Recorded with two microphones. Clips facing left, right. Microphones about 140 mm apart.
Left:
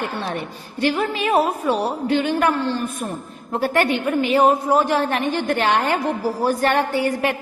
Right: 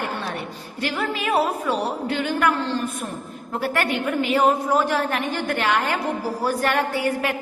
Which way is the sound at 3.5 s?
25° left (ahead or behind).